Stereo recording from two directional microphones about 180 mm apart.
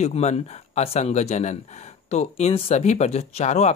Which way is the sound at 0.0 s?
35° left (ahead or behind).